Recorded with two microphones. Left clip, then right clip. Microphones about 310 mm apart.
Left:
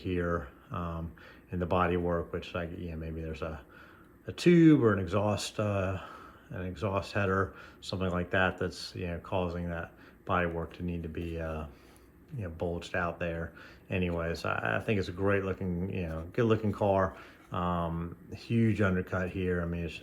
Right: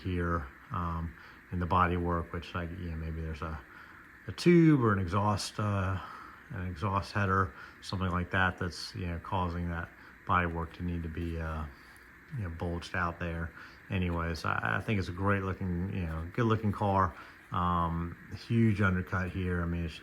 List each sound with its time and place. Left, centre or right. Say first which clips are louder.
0.0 s speech: left 2 dB; centre